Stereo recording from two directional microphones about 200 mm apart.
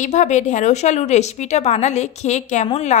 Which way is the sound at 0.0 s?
35° left (ahead or behind).